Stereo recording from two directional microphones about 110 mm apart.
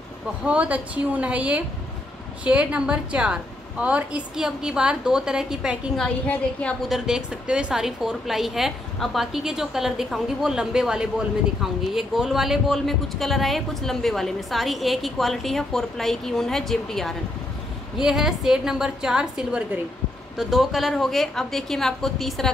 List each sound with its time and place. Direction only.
0.5 s a woman's voice: 15° right (ahead or behind)
5.9 s a woman's voice: 10° left (ahead or behind)
6.9 s a woman's voice: 5° right (ahead or behind)